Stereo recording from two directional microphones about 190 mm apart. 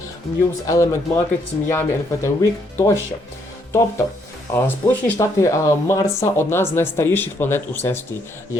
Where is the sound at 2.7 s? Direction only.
15° left (ahead or behind).